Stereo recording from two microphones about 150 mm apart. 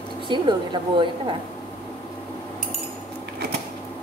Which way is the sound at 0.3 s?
30° right (ahead or behind).